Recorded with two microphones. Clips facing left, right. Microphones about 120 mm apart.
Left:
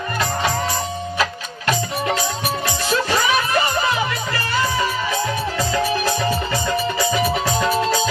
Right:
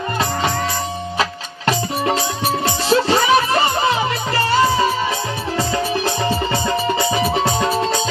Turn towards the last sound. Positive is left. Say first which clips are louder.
# even
turn(degrees=-30)  # may be behind; listen again after turning